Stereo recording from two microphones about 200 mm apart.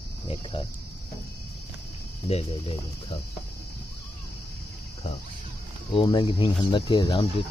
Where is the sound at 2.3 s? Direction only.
30° left (ahead or behind).